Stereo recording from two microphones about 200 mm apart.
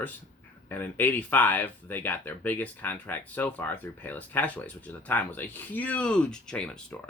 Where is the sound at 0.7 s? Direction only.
10° left (ahead or behind).